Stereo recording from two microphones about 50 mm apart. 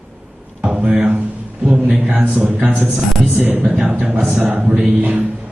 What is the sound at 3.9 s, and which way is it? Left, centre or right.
Speech, right.